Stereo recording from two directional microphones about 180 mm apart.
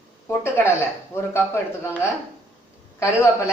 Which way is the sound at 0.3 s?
10° left (ahead or behind).